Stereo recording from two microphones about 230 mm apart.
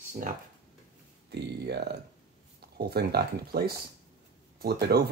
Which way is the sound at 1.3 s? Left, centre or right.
Right.